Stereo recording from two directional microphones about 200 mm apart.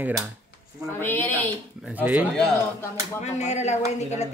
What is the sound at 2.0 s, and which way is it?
Speech, 10° right (ahead or behind).